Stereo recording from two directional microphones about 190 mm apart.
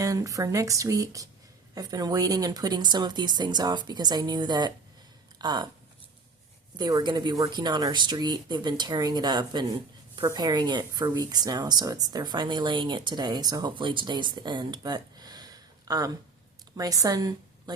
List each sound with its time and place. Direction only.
0.0 s speech: 15° right (ahead or behind)
6.7 s a woman's voice: 20° right (ahead or behind)